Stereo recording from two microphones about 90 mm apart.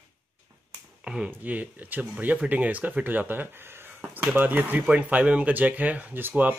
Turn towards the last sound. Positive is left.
turn(degrees=-20)  # may be behind; listen again after turning